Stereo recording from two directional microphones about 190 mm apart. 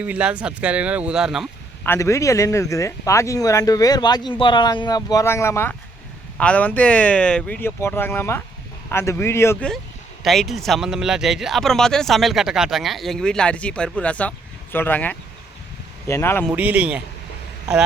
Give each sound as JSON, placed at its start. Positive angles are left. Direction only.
{"t": 0.0, "sound": "speech", "side_deg": -5}
{"t": 1.8, "sound": "speech", "side_deg": 15}
{"t": 16.6, "sound": "speech", "side_deg": -5}